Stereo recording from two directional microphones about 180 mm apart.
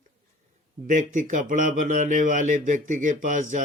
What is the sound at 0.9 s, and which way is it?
Speech, 45° right (ahead or behind).